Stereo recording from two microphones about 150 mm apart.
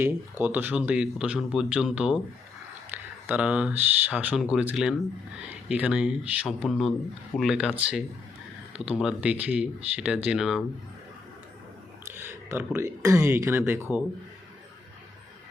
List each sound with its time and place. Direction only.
0.0 s speech: 15° right (ahead or behind)
12.0 s speech: 15° right (ahead or behind)